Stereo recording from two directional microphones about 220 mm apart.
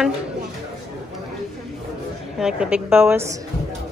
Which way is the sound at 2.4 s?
5° right (ahead or behind).